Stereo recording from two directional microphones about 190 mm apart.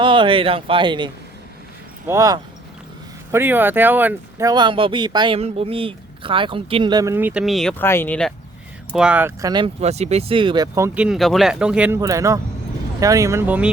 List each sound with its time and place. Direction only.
0.0 s speech: 25° right (ahead or behind); by 8.3 s 10° left (ahead or behind)
8.9 s speech: 5° right (ahead or behind); by 9.7 s 20° right (ahead or behind)
9.8 s speech: 35° right (ahead or behind); by 11.9 s 5° right (ahead or behind)
11.9 s speech: 15° right (ahead or behind)